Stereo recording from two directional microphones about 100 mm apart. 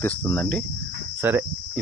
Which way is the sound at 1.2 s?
20° right (ahead or behind).